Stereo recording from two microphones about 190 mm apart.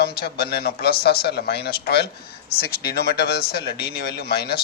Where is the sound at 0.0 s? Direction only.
55° left (ahead or behind).